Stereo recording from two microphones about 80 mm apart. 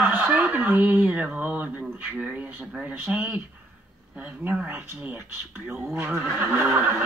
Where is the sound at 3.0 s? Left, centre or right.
Right.